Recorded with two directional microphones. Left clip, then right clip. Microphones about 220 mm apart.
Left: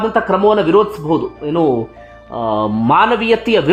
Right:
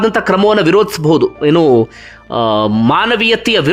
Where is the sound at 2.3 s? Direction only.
15° right (ahead or behind).